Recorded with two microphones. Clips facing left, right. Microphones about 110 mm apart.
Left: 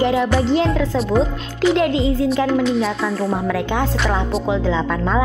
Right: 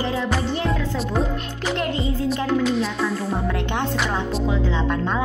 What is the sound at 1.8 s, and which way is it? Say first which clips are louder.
Speech: left 7 dB; 90° left.